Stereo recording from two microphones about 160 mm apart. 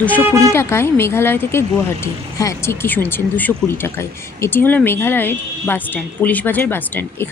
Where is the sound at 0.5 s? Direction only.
15° left (ahead or behind).